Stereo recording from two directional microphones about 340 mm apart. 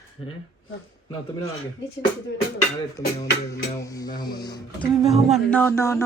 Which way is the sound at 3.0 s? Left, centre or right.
Centre.